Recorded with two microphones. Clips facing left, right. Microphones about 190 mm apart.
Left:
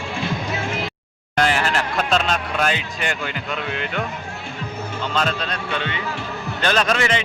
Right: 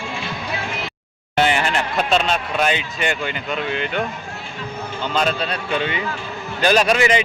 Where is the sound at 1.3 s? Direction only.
Centre (ahead or behind).